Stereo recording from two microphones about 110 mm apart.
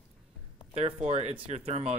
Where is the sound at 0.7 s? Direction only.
75° right (ahead or behind).